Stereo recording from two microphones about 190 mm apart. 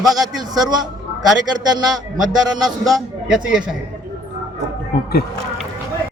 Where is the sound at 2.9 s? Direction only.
5° right (ahead or behind).